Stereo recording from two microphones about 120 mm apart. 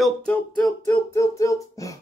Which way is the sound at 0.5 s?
10° left (ahead or behind).